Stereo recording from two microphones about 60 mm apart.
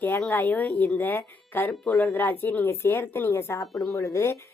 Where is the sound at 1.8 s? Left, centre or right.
Centre.